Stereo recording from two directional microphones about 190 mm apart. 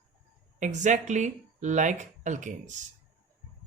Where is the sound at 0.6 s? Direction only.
40° right (ahead or behind).